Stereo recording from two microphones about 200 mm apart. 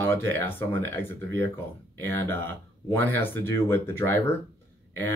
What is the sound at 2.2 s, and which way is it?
Speech, 10° left (ahead or behind).